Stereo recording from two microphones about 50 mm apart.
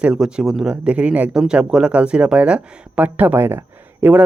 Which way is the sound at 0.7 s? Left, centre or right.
Right.